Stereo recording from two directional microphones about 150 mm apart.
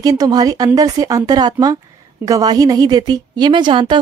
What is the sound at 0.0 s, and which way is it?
A woman's voice, 25° right (ahead or behind).